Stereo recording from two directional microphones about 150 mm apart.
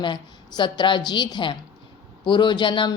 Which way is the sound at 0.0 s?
30° left (ahead or behind).